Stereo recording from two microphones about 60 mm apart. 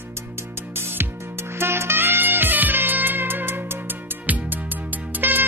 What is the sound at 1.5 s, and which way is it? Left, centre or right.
Music, right.